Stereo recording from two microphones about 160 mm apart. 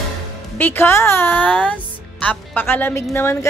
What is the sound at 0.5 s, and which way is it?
A woman's voice, 15° left (ahead or behind).